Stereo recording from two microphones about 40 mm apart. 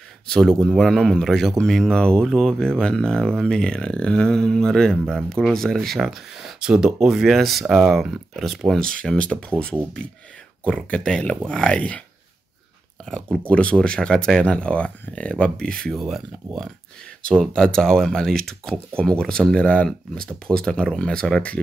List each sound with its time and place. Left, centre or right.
0.3 s speech: centre
6.6 s speech: centre
8.7 s speech: centre
10.9 s speech: left
13.0 s speech: centre
13.5 s speech: left
13.7 s speech: left
14.1 s speech: centre
14.4 s speech: left
15.9 s speech: centre
17.6 s speech: centre
18.9 s speech: left
19.5 s speech: left